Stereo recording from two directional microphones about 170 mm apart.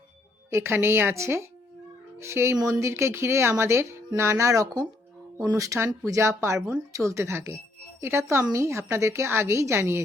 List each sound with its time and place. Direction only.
0.5 s speech: 15° right (ahead or behind)